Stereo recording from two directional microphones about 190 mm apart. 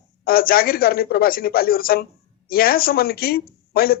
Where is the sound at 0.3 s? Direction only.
50° left (ahead or behind).